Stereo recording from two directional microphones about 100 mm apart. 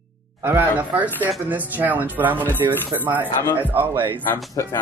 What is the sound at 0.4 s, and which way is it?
Speech, 20° right (ahead or behind).